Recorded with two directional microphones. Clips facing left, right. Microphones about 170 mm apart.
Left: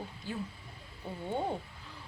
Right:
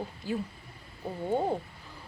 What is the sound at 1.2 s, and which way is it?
Speech, 35° right (ahead or behind).